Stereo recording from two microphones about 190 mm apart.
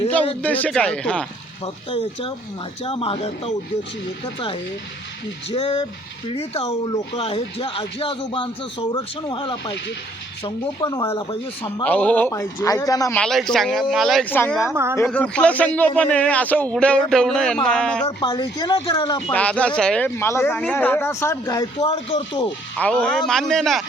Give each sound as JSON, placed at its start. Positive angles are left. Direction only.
{"t": 0.4, "sound": "speech", "side_deg": 10}
{"t": 1.6, "sound": "speech", "side_deg": 30}
{"t": 5.5, "sound": "speech", "side_deg": 30}
{"t": 10.8, "sound": "a man's voice", "side_deg": 15}
{"t": 13.1, "sound": "a man's voice", "side_deg": 5}
{"t": 18.0, "sound": "speech", "side_deg": 25}
{"t": 19.3, "sound": "a man's voice", "side_deg": 5}
{"t": 21.8, "sound": "speech", "side_deg": 30}
{"t": 22.8, "sound": "speech", "side_deg": 5}